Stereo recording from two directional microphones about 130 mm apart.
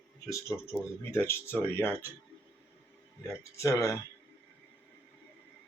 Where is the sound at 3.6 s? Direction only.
25° left (ahead or behind).